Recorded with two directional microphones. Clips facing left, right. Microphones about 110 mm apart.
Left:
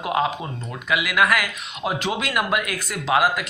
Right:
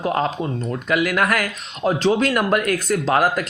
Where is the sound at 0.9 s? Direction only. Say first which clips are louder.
Right 1 dB; 45° right (ahead or behind).